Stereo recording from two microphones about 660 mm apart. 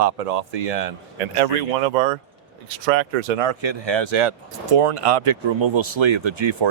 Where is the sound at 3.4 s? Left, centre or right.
Right.